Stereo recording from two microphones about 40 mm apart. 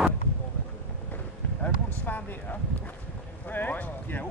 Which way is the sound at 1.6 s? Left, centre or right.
Left.